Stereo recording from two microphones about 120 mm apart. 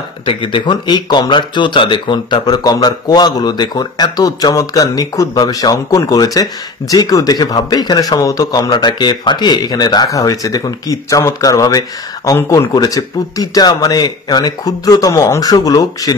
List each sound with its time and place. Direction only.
0.2 s speech: 45° left (ahead or behind); by 16.2 s 30° left (ahead or behind)